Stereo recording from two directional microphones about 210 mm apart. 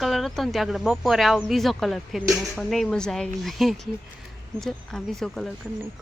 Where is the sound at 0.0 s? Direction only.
Centre (ahead or behind).